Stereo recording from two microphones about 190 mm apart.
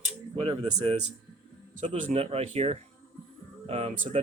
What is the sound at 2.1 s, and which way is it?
Speech, 30° right (ahead or behind).